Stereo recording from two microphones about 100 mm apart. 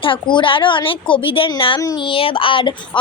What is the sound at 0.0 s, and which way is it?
A woman's voice, 55° left (ahead or behind).